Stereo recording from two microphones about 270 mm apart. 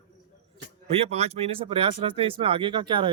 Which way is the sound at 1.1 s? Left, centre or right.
Right.